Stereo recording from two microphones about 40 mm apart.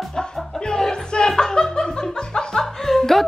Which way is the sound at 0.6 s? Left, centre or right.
Centre.